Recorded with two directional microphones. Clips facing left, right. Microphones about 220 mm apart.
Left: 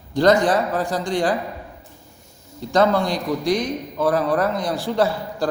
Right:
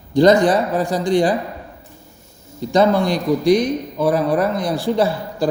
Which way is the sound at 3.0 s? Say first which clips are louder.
Right 5 dB; 65° right (ahead or behind).